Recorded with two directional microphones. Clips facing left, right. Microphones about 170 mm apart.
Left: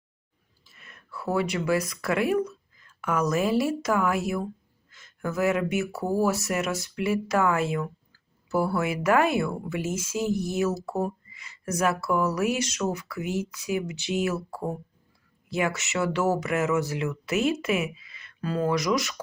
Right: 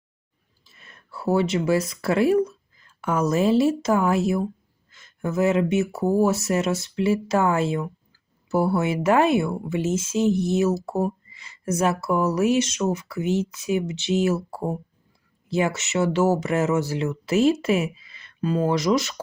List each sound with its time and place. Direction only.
0.6 s a woman's voice: 30° right (ahead or behind)